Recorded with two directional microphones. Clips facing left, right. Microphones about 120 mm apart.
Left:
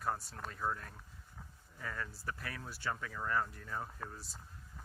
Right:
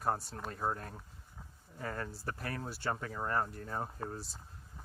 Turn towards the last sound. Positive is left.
turn(degrees=-30)  # may be behind; listen again after turning